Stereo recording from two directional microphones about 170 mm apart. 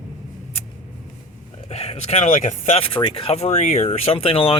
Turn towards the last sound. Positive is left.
turn(degrees=35)  # may be behind; listen again after turning